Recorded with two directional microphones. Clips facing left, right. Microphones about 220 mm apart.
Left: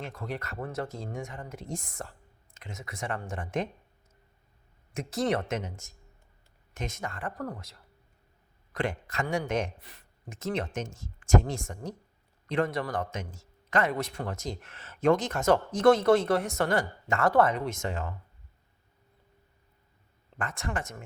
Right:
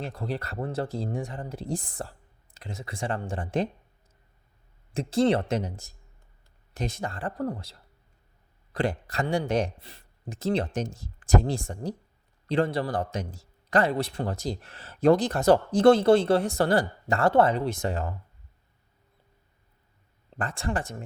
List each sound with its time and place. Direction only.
0.0 s a man's voice: 30° right (ahead or behind)
4.9 s a man's voice: 30° right (ahead or behind)
20.3 s a man's voice: 30° right (ahead or behind)